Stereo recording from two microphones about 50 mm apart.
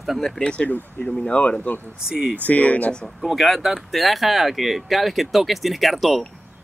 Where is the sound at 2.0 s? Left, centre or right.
Centre.